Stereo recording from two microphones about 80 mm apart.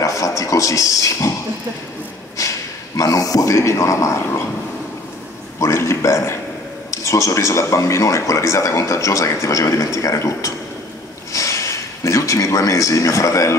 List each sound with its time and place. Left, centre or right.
0.0 s speech: left
3.0 s speech: left
5.6 s speech: left